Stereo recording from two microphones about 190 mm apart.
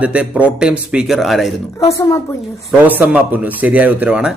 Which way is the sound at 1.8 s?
15° left (ahead or behind).